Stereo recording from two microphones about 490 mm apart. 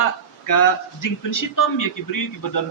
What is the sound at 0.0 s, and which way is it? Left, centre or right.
A man's voice, left.